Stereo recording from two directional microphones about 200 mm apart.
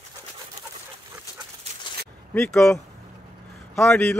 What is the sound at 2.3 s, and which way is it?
Speech, 5° left (ahead or behind).